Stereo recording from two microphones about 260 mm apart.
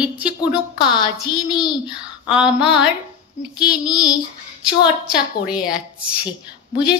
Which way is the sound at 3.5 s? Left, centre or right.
Centre.